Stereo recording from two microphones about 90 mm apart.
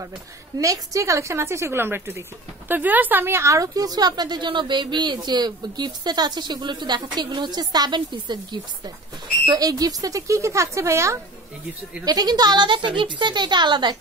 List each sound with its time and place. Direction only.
0.6 s speech: 35° right (ahead or behind)
12.0 s speech: 45° right (ahead or behind)